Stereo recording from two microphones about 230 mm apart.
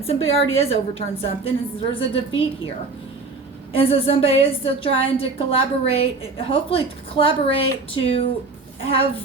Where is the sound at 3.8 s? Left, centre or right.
Left.